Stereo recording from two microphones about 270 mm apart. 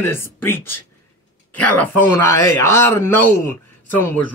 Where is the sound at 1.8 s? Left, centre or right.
Centre.